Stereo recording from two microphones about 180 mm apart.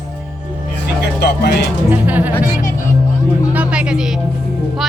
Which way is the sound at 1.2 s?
70° left (ahead or behind).